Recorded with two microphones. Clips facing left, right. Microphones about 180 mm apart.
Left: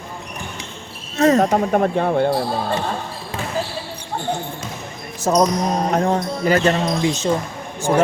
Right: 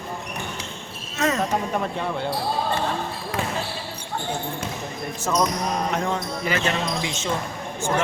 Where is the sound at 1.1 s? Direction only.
35° left (ahead or behind).